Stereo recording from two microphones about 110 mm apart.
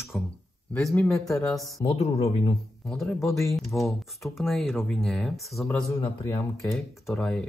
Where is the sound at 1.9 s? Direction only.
65° left (ahead or behind).